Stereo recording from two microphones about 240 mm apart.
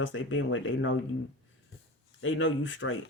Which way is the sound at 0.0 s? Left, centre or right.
Left.